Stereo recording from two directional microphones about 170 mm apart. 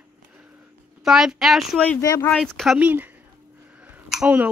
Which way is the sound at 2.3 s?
5° left (ahead or behind).